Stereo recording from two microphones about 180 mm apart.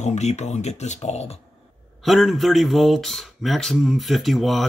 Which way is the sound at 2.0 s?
Centre (ahead or behind).